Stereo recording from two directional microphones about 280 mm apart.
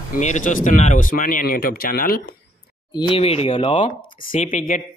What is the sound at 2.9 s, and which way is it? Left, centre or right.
Speech, centre.